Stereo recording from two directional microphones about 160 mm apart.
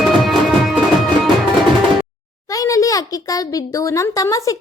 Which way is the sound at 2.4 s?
20° left (ahead or behind).